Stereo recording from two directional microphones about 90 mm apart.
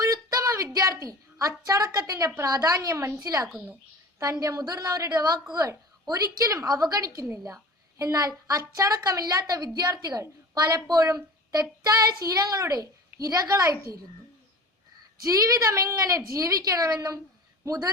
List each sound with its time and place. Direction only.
0.0 s a sound: 40° right (ahead or behind)
2.4 s a woman's voice: 45° right (ahead or behind)
15.2 s a woman's voice: 40° right (ahead or behind)